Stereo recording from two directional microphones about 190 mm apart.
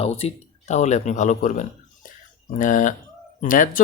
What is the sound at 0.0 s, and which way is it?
Speech, 35° left (ahead or behind).